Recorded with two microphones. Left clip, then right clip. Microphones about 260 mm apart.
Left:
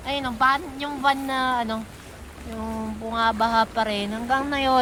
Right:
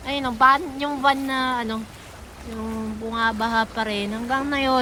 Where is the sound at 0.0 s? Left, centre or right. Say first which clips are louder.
Right 4 dB; centre.